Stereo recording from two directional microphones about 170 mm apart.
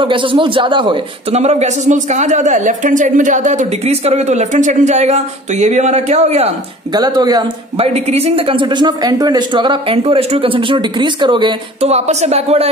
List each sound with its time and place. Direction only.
0.0 s a man's voice: 30° right (ahead or behind)
6.9 s a man's voice: 25° right (ahead or behind)
7.8 s a man's voice: 35° right (ahead or behind)